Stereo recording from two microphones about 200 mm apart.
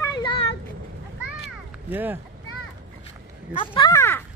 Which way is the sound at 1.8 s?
10° right (ahead or behind).